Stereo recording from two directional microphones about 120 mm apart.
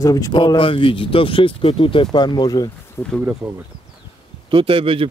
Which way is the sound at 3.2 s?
15° right (ahead or behind).